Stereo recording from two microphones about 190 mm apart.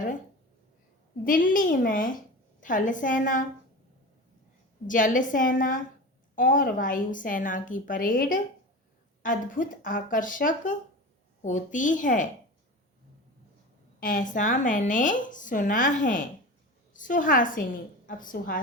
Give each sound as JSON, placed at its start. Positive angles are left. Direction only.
{"t": 1.2, "sound": "speech", "side_deg": 45}
{"t": 4.9, "sound": "speech", "side_deg": 45}
{"t": 14.0, "sound": "a woman's voice", "side_deg": 45}